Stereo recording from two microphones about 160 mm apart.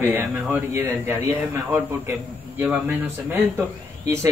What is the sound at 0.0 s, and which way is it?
A man's voice, 15° right (ahead or behind).